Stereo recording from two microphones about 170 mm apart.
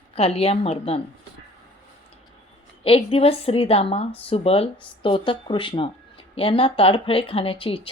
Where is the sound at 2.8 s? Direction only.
35° left (ahead or behind).